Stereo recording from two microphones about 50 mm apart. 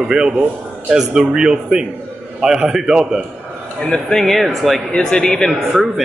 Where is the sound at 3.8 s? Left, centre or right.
Centre.